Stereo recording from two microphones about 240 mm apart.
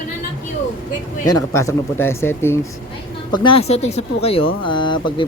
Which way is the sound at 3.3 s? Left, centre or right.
Left.